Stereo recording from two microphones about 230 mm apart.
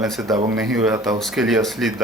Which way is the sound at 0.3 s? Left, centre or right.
Centre.